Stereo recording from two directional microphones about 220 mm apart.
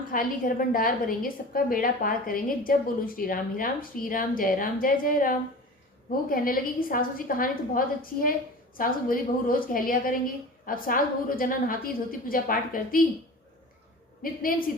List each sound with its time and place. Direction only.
0.1 s a woman's voice: 40° left (ahead or behind)
14.2 s a woman's voice: 40° left (ahead or behind)